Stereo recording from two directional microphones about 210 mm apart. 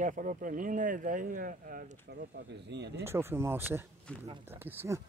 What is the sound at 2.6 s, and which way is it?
Speech, 55° right (ahead or behind).